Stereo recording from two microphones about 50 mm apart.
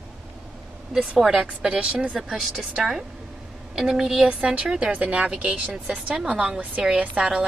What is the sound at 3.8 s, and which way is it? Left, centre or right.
Speech, centre.